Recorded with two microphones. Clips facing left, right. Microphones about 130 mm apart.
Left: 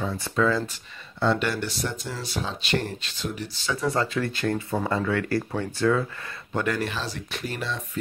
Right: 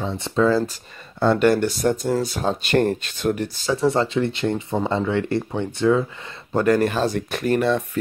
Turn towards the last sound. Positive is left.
turn(degrees=-55)  # may be behind; listen again after turning